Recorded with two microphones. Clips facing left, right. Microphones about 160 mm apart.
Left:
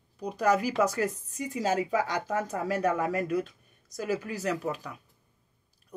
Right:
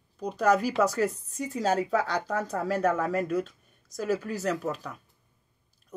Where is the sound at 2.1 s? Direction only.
15° left (ahead or behind).